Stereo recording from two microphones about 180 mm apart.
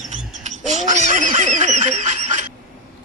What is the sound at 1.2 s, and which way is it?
Goose, 45° right (ahead or behind).